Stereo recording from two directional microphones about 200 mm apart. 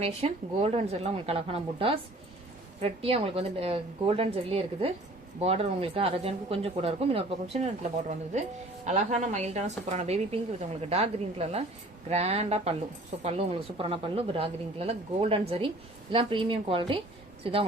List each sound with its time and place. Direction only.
0.0 s speech: 30° right (ahead or behind)
8.9 s a woman's voice: 35° right (ahead or behind)